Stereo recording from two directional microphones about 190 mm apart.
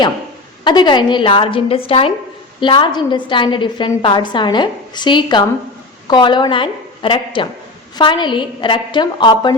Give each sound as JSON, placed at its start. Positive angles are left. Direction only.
{"t": 0.6, "sound": "a woman's voice", "side_deg": 25}